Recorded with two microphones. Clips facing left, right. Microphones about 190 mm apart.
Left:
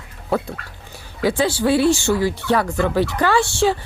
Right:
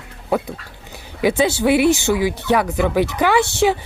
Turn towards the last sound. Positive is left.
turn(degrees=-20)  # may be behind; listen again after turning